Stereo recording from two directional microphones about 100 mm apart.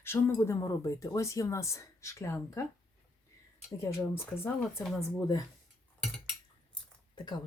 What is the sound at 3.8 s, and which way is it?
Speech, 25° left (ahead or behind).